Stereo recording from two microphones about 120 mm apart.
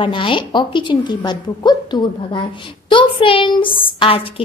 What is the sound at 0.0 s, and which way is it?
A woman's voice, 45° left (ahead or behind).